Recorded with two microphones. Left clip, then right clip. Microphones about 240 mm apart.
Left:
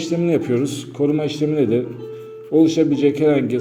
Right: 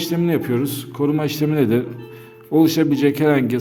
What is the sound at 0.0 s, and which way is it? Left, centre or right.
A man's voice, right.